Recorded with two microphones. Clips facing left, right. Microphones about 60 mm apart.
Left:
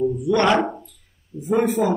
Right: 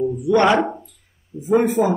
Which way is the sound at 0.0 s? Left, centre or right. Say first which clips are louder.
Right 2 dB; centre.